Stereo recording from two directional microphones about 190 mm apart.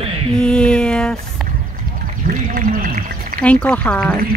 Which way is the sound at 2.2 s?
45° right (ahead or behind).